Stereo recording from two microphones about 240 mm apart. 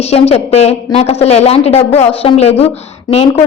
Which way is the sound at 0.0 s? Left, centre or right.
Left.